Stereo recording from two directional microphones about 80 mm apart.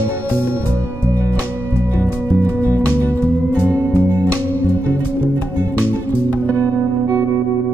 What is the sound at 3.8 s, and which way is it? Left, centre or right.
Music, left.